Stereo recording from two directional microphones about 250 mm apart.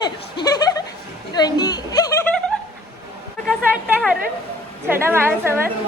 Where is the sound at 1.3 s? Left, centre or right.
Centre.